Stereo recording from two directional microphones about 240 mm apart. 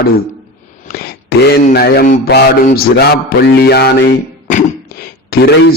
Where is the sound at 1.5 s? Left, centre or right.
Left.